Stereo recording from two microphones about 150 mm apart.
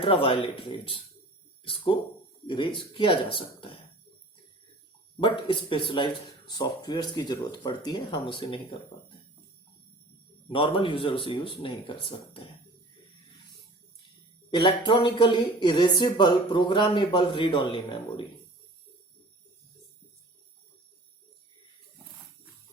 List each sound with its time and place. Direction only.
0.0 s speech: 35° left (ahead or behind)
1.6 s speech: 35° left (ahead or behind)
5.2 s speech: 35° left (ahead or behind)
10.5 s speech: 35° left (ahead or behind)
14.5 s speech: 30° left (ahead or behind)